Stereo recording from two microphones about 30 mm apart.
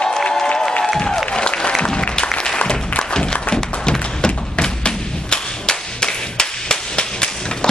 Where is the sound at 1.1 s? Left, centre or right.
Left.